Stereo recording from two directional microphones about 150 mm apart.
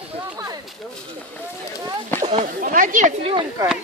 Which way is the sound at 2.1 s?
10° left (ahead or behind).